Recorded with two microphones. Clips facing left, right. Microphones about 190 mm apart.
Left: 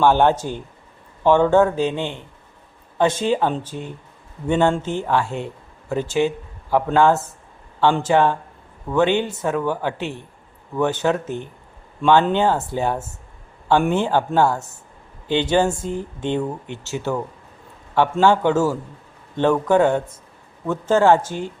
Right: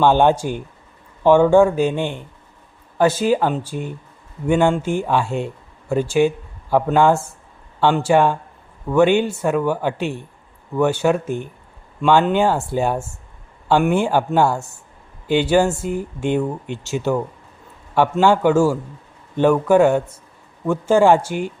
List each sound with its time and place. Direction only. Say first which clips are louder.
0.0 s speech: right 1 dB; 15° right (ahead or behind)
18.2 s speech: right 2 dB; 10° right (ahead or behind)